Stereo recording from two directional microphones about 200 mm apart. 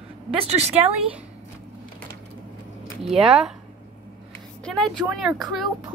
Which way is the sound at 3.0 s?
5° right (ahead or behind).